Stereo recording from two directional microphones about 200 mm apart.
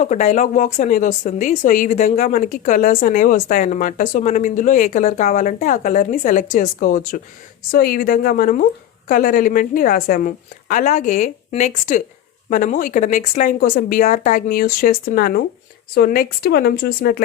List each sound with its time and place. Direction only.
0.0 s speech: 35° left (ahead or behind)